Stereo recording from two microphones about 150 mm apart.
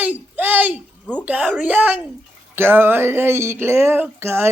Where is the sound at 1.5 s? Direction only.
10° right (ahead or behind).